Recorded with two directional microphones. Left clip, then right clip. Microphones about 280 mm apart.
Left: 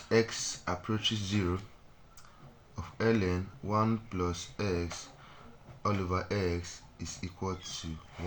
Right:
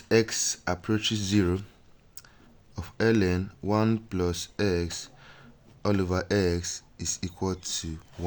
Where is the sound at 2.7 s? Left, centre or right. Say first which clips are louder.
Right 5 dB; right.